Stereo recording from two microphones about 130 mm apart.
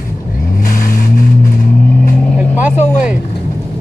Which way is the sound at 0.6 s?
90° left.